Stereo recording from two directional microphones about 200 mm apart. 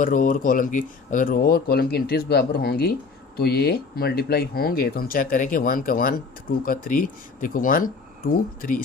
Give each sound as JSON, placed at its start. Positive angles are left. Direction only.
{"t": 0.0, "sound": "speech", "side_deg": 40}